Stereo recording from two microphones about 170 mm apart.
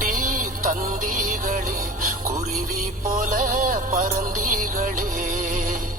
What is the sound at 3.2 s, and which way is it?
Music, 45° right (ahead or behind).